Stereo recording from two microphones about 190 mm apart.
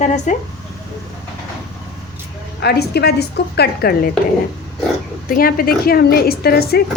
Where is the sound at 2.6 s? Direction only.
55° left (ahead or behind).